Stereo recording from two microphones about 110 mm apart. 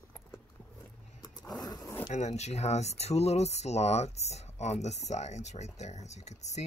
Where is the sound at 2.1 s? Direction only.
90° left.